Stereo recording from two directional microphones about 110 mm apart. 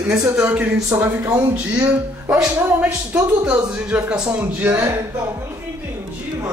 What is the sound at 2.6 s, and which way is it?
Speech, 15° right (ahead or behind).